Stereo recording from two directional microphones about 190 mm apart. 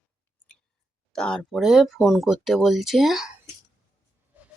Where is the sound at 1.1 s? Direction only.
5° left (ahead or behind).